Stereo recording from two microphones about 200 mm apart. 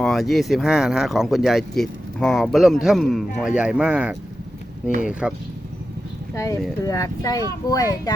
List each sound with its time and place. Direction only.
0.0 s speech: centre (ahead or behind)
5.2 s speech: 5° right (ahead or behind)
6.3 s speech: 15° left (ahead or behind)